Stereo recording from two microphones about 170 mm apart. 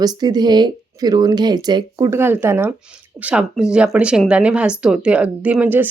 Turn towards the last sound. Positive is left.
turn(degrees=-10)  # may be behind; listen again after turning